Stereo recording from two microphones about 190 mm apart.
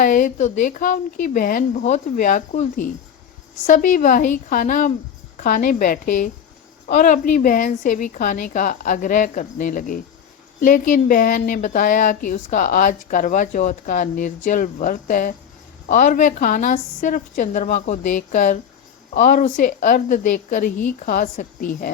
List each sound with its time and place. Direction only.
0.0 s speech: 45° left (ahead or behind)